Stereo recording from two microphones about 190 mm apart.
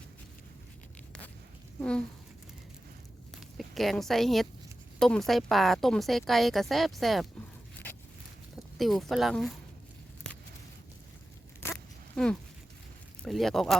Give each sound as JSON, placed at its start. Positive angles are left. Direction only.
{"t": 3.6, "sound": "speech", "side_deg": 0}
{"t": 8.5, "sound": "speech", "side_deg": 0}
{"t": 10.3, "sound": "a sound", "side_deg": 5}
{"t": 12.1, "sound": "speech", "side_deg": 5}